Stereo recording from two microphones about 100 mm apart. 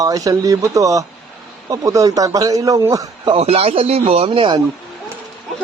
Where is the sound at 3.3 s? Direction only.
85° right; by 4.6 s 55° right (ahead or behind).